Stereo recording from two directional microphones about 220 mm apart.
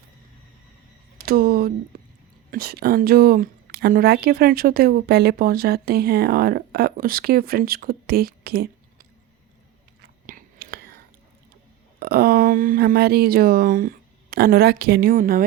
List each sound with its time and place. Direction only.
1.2 s speech: 40° right (ahead or behind)
10.2 s chewing: 40° right (ahead or behind)
11.9 s speech: 45° right (ahead or behind)